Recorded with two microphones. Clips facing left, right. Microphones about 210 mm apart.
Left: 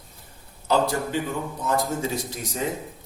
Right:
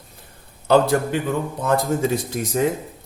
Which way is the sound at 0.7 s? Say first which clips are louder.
Right 6 dB; 60° right (ahead or behind).